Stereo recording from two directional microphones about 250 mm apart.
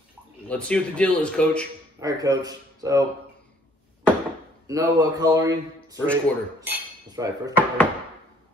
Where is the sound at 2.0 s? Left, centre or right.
Centre.